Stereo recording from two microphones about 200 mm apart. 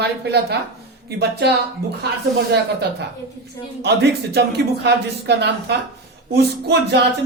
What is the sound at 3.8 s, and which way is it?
A man's voice, 55° right (ahead or behind).